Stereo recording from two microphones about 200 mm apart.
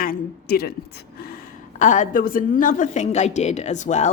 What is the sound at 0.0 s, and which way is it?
Speech, 50° left (ahead or behind).